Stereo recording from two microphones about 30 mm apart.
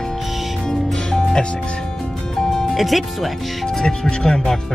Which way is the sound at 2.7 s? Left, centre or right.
Centre.